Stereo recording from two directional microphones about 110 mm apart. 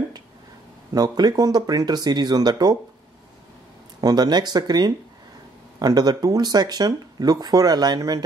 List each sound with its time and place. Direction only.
0.9 s speech: 35° right (ahead or behind)
4.0 s speech: 40° right (ahead or behind)